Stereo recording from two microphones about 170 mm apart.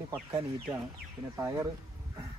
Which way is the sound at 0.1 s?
10° right (ahead or behind).